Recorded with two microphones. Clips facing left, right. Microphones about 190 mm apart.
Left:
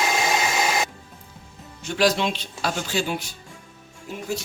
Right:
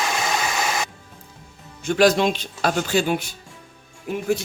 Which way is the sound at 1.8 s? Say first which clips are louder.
Right 5 dB; 50° right (ahead or behind).